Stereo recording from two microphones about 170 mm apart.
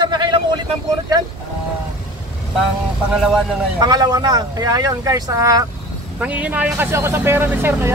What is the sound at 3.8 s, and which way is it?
Speech, 25° right (ahead or behind).